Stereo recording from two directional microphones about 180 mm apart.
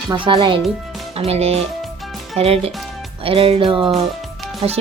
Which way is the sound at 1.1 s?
35° right (ahead or behind).